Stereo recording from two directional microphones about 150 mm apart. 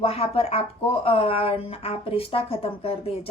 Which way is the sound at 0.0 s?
40° left (ahead or behind).